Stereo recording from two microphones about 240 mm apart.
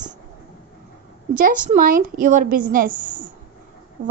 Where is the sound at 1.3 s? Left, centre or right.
Right.